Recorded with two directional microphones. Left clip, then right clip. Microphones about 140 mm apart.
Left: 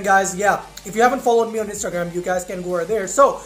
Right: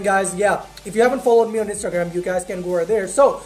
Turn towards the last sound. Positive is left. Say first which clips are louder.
# even
turn(degrees=-20)  # may be behind; listen again after turning